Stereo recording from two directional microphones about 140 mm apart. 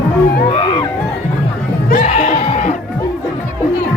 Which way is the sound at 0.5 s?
35° left (ahead or behind).